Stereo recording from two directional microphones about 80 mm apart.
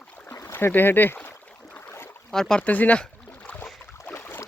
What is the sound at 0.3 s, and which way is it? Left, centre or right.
Boat, left.